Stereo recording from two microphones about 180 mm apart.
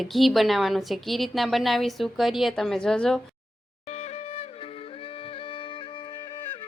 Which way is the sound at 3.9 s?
35° left (ahead or behind).